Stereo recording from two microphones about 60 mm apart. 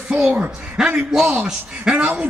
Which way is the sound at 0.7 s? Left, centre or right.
Centre.